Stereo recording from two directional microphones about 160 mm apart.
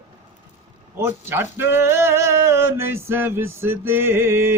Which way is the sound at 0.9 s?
15° right (ahead or behind).